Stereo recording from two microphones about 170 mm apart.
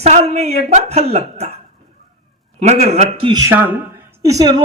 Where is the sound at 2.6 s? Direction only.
40° right (ahead or behind).